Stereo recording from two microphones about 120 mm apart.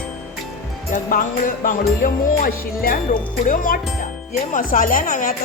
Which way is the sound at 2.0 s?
90° left.